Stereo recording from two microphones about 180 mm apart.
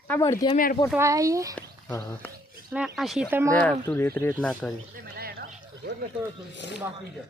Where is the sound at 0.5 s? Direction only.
50° left (ahead or behind).